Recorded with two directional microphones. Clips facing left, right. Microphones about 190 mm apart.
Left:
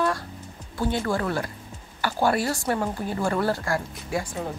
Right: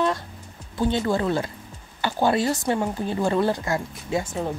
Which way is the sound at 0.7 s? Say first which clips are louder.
Right 3 dB; 20° right (ahead or behind).